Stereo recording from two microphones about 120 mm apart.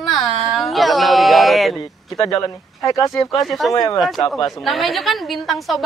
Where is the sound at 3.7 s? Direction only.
30° left (ahead or behind).